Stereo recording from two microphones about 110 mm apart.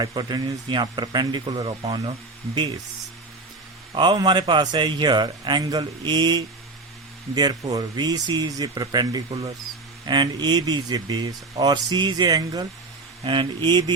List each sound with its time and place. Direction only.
0.0 s speech: 40° right (ahead or behind)
3.9 s a man's voice: 45° right (ahead or behind)
13.2 s a man's voice: 50° right (ahead or behind)